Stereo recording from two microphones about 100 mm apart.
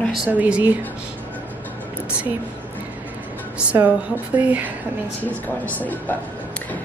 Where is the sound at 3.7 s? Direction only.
15° right (ahead or behind).